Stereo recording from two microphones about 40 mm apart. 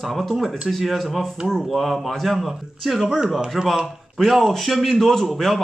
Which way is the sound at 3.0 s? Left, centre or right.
Centre.